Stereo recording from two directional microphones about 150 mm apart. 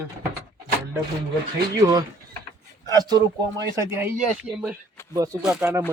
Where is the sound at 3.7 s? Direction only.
15° right (ahead or behind).